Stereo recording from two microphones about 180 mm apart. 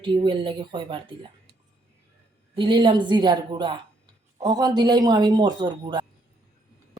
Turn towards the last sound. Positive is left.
turn(degrees=-25)  # may be behind; listen again after turning